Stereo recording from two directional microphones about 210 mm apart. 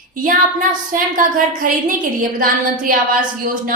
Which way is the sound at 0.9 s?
40° right (ahead or behind).